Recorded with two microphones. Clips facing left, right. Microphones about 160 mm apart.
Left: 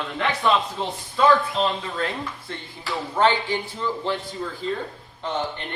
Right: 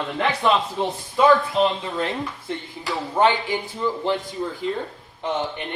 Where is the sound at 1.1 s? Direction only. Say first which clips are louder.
Right 2 dB; 20° right (ahead or behind).